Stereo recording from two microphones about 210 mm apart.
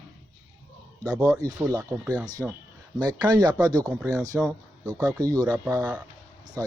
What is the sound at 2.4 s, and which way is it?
Speech, 5° right (ahead or behind).